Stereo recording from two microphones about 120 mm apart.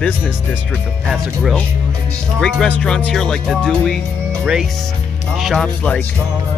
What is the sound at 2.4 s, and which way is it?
Speech, 5° left (ahead or behind).